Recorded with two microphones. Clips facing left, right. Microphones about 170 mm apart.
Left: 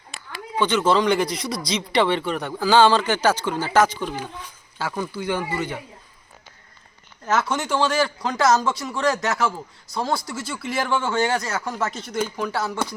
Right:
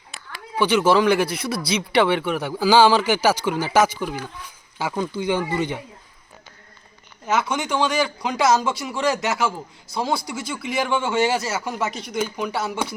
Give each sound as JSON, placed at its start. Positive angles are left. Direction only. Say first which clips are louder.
{"t": 0.6, "sound": "speech", "louder": "right 2 dB", "side_deg": -10}
{"t": 7.3, "sound": "speech", "louder": "even", "side_deg": 0}
{"t": 11.6, "sound": "speech", "louder": "right 1 dB", "side_deg": -20}